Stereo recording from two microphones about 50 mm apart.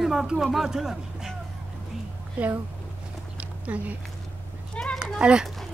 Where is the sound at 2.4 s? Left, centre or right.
Right.